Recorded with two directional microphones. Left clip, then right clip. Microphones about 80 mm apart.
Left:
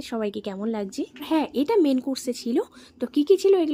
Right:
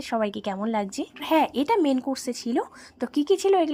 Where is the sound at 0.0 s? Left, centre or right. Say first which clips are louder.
Right 2 dB; right.